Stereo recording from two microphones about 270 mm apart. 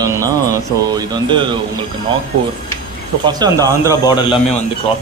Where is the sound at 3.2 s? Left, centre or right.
Centre.